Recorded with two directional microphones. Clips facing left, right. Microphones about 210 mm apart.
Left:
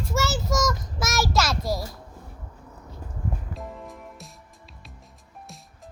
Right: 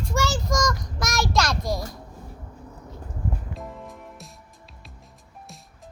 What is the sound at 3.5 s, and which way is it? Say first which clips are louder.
Music: even; centre (ahead or behind).